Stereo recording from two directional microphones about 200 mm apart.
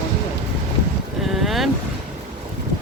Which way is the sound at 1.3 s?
Centre (ahead or behind).